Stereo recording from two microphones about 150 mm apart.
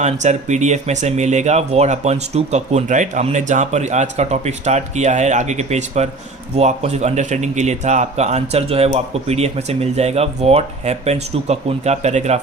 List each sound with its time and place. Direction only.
0.0 s speech: 50° right (ahead or behind)